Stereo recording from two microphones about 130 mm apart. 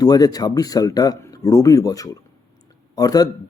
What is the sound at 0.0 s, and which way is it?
Speech, 30° left (ahead or behind).